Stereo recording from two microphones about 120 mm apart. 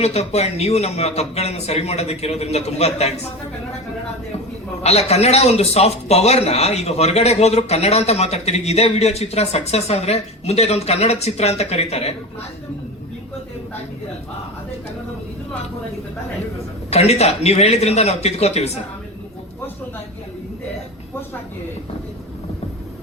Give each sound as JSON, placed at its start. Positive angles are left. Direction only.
{"t": 0.0, "sound": "a man's voice", "side_deg": 60}
{"t": 4.8, "sound": "a man's voice", "side_deg": 60}
{"t": 16.9, "sound": "a man's voice", "side_deg": 60}